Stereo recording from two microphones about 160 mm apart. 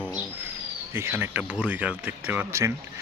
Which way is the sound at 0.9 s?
15° right (ahead or behind).